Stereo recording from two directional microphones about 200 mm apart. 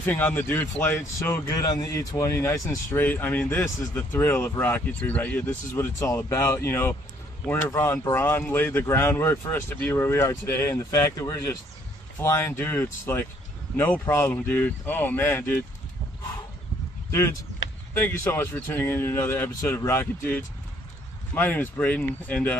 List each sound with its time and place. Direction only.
0.0 s speech: 10° left (ahead or behind)
17.6 s a sound: 70° left (ahead or behind)
17.9 s speech: 10° left (ahead or behind)